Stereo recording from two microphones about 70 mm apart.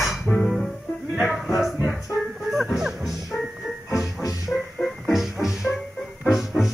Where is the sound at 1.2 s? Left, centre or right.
Centre.